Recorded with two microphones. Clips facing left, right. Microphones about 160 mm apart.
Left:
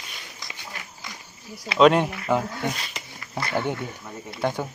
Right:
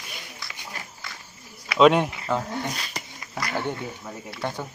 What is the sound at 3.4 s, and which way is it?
Speech, 30° left (ahead or behind).